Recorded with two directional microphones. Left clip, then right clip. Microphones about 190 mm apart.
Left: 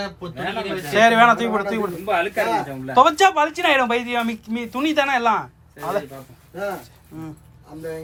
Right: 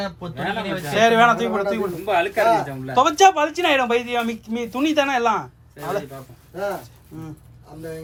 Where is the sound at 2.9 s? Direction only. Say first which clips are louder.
Even; 15° right (ahead or behind).